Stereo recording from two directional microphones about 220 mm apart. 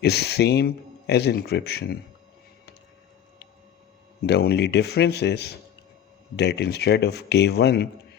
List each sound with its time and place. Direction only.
0.0 s speech: 50° left (ahead or behind)
4.3 s speech: 50° left (ahead or behind)